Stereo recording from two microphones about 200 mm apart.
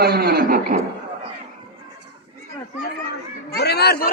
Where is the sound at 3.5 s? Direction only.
55° left (ahead or behind).